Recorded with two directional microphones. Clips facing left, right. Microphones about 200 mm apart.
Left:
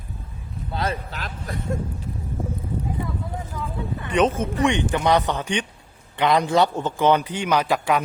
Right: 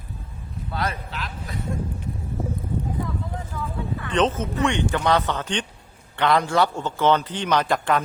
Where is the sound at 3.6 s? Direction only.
15° left (ahead or behind).